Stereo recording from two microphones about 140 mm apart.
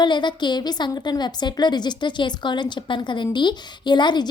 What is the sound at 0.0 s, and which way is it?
A woman's voice, 35° left (ahead or behind).